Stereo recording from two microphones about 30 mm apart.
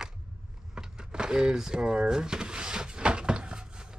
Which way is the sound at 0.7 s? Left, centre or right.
Right.